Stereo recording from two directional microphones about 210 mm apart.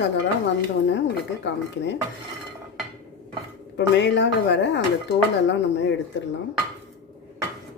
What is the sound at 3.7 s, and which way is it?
Speech, 55° left (ahead or behind).